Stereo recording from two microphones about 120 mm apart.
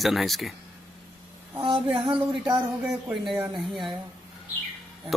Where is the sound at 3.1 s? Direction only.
Centre (ahead or behind).